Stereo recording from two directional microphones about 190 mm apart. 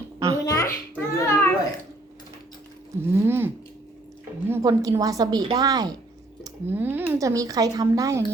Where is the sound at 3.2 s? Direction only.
10° right (ahead or behind).